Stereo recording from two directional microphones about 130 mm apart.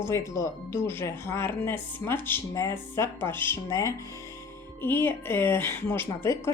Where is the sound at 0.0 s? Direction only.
25° left (ahead or behind).